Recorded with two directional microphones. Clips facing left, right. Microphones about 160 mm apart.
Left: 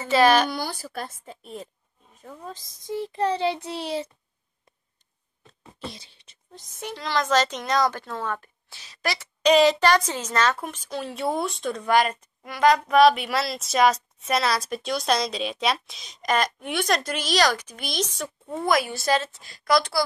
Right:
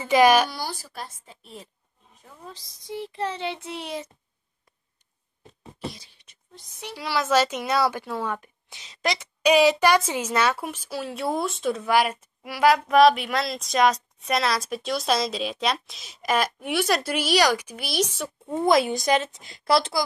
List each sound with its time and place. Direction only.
0.0 s speech: 15° right (ahead or behind)
0.5 s a woman's voice: 55° left (ahead or behind); by 4.1 s 30° left (ahead or behind)
5.9 s beatboxing: 25° left (ahead or behind)
6.5 s a woman's voice: 45° left (ahead or behind)
6.9 s speech: 10° right (ahead or behind)
18.7 s a woman's voice: 25° right (ahead or behind)